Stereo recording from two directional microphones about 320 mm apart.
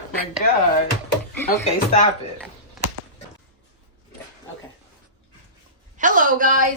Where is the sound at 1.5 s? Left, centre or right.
Left.